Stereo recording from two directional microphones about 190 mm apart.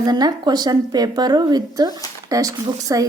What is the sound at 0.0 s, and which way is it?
A woman's voice, 20° right (ahead or behind).